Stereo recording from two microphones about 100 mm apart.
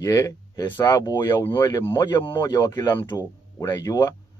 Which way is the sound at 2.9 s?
25° left (ahead or behind).